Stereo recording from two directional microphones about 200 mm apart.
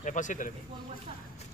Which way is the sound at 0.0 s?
40° left (ahead or behind).